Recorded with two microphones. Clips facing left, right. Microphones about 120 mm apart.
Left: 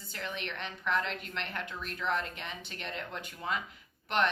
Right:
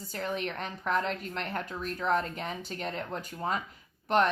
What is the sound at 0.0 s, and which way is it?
A woman's voice, 40° right (ahead or behind).